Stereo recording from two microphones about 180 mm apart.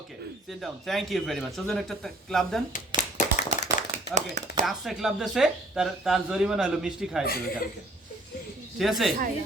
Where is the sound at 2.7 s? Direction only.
45° left (ahead or behind).